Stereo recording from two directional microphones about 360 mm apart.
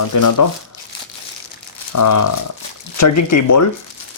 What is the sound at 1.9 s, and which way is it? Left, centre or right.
Speech, left.